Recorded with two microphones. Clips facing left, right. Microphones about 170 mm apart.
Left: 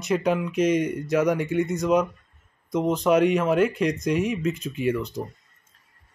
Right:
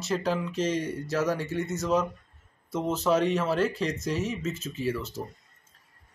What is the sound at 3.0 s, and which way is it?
Speech, 10° left (ahead or behind).